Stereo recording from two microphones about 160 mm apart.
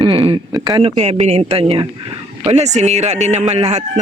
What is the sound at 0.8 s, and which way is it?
A man's voice, 35° right (ahead or behind).